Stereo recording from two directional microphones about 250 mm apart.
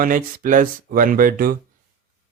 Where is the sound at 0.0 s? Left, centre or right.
Right.